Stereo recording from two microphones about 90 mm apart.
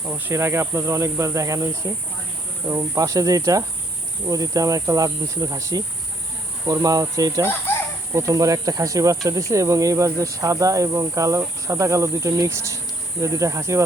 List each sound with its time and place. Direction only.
0.0 s speech: 25° right (ahead or behind)